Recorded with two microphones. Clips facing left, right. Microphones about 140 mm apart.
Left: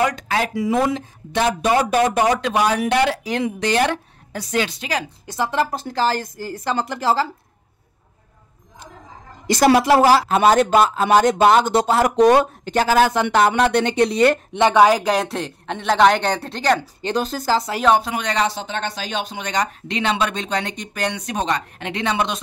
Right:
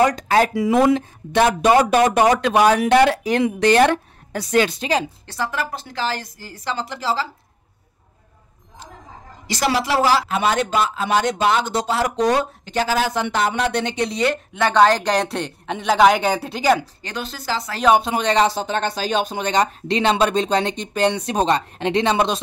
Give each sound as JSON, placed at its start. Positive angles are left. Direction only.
{"t": 0.0, "sound": "speech", "side_deg": -40}
{"t": 0.6, "sound": "a woman's voice", "side_deg": -70}
{"t": 5.2, "sound": "a woman's voice", "side_deg": 15}
{"t": 5.7, "sound": "speech", "side_deg": 40}
{"t": 9.5, "sound": "speech", "side_deg": 55}
{"t": 14.6, "sound": "speech", "side_deg": 10}
{"t": 17.1, "sound": "speech", "side_deg": 45}
{"t": 18.0, "sound": "speech", "side_deg": -30}